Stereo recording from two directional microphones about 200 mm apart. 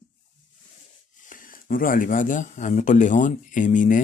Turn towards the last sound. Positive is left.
turn(degrees=40)  # may be behind; listen again after turning